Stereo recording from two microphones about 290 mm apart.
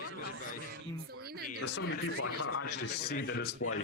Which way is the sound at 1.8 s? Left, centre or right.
Left.